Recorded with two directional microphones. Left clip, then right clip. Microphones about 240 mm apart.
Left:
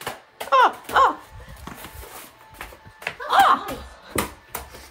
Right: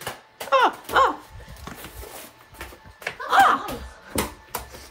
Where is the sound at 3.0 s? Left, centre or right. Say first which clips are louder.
Even; centre.